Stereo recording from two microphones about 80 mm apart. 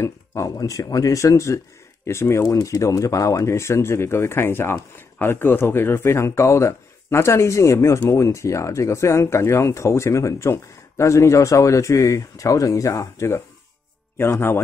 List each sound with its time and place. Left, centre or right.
0.3 s speech: left